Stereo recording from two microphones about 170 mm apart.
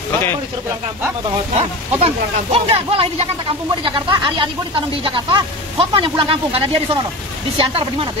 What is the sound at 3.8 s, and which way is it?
Speech, 30° right (ahead or behind).